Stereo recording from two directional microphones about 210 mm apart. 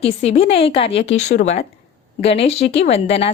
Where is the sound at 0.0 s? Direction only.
30° left (ahead or behind).